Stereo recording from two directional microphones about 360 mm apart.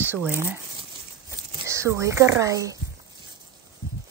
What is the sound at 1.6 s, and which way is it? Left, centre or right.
Speech, centre.